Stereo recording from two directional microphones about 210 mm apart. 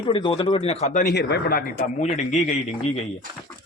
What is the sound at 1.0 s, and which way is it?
A man's voice, 50° left (ahead or behind).